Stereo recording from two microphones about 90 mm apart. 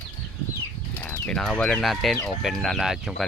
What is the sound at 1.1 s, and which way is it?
Speech, 10° left (ahead or behind).